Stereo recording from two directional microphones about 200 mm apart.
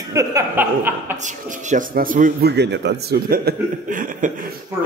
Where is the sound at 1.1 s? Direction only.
35° right (ahead or behind).